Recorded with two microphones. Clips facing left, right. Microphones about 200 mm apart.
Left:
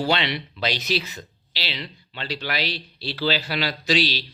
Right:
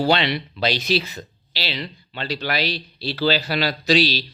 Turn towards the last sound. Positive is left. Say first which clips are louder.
# right 4 dB
turn(degrees=-40)  # may be behind; listen again after turning